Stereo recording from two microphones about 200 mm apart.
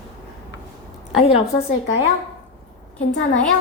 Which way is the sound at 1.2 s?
30° left (ahead or behind).